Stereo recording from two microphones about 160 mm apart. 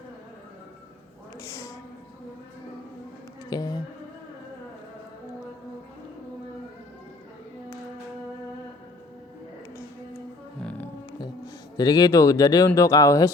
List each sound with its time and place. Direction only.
1.4 s a sound: 20° left (ahead or behind)
3.5 s insect: 25° left (ahead or behind)
10.6 s music: 5° left (ahead or behind)
11.8 s speech: 25° left (ahead or behind)